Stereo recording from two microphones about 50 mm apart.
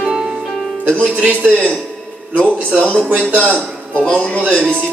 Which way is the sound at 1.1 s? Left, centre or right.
Right.